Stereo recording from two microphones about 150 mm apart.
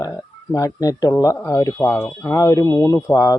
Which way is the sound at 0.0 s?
20° left (ahead or behind).